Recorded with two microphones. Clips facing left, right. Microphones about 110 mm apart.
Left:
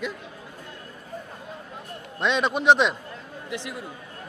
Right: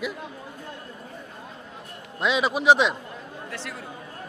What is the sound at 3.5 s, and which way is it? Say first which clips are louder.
Speech: left 5 dB; 15° left (ahead or behind).